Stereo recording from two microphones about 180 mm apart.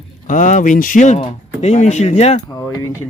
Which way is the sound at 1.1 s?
35° left (ahead or behind).